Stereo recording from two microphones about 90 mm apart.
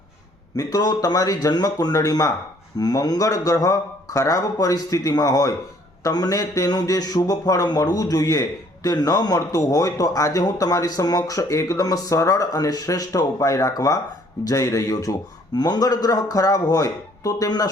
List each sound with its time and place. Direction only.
0.5 s a man's voice: 40° left (ahead or behind)
15.5 s a man's voice: 50° left (ahead or behind)